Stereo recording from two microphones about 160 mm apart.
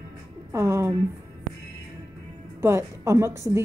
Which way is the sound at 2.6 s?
15° right (ahead or behind).